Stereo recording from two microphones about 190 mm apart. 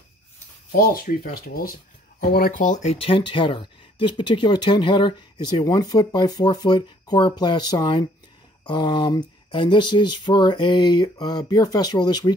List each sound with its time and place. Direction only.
0.7 s speech: 50° left (ahead or behind); by 12.4 s 20° left (ahead or behind)